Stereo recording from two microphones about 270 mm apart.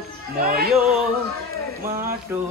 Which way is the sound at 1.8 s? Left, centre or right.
Centre.